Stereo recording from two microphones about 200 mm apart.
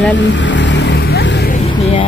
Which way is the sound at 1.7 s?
25° left (ahead or behind).